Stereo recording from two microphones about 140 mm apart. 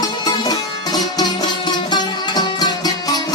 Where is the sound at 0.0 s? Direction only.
30° left (ahead or behind).